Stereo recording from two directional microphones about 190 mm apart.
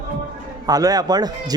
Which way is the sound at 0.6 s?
20° right (ahead or behind).